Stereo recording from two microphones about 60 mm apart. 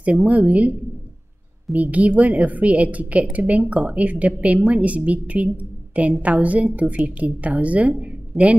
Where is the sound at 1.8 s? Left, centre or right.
Right.